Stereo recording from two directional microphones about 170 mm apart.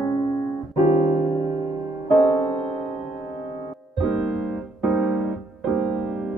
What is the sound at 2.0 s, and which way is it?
Music, 25° left (ahead or behind).